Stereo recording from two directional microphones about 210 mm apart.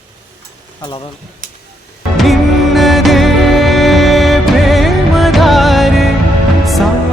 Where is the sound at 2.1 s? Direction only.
Centre (ahead or behind).